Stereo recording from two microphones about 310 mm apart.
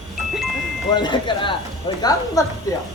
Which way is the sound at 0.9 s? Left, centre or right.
Centre.